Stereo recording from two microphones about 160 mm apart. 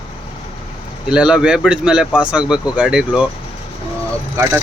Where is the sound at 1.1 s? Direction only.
5° right (ahead or behind).